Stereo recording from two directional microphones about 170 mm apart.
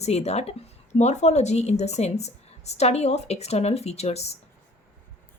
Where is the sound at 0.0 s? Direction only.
40° left (ahead or behind).